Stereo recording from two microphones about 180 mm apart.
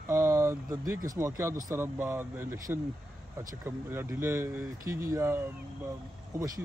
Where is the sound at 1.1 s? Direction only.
15° right (ahead or behind).